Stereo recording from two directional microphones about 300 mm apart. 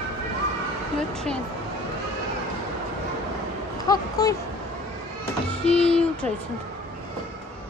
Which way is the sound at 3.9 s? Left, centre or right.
Centre.